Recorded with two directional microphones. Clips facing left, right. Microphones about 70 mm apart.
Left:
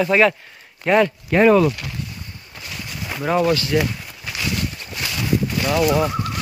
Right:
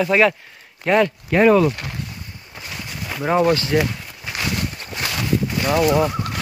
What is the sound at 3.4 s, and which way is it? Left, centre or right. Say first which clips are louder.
Speech: right 2 dB; right.